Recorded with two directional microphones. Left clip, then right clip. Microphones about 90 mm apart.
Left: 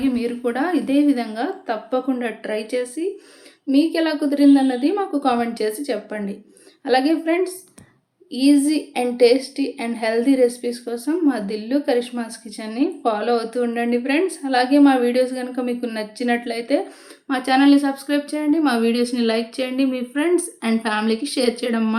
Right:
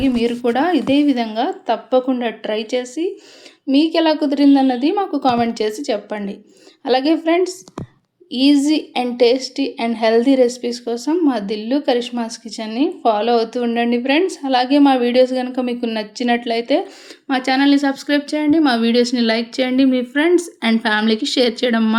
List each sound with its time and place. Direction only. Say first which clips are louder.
0.0 s a woman's voice: right 5 dB; 45° right (ahead or behind)